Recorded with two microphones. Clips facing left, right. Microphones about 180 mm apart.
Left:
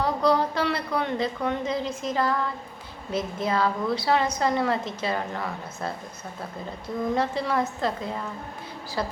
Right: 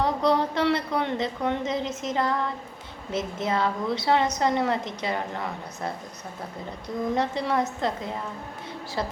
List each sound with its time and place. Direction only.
0.0 s a woman's voice: 25° right (ahead or behind)
7.2 s a woman's voice: 20° right (ahead or behind)